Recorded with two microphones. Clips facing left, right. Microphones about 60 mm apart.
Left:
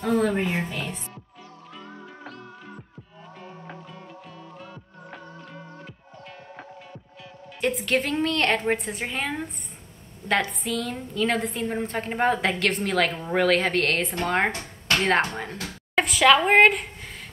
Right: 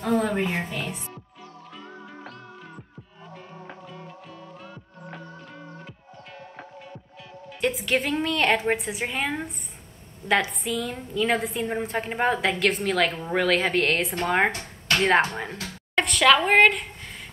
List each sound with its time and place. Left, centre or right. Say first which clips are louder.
0.0 s a woman's voice: left 1 dB; centre
7.6 s a woman's voice: even; centre
14.5 s a sound: even; centre
15.9 s a woman's voice: left 1 dB; centre